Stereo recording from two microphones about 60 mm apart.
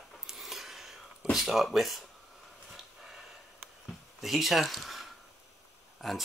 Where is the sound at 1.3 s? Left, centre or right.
Centre.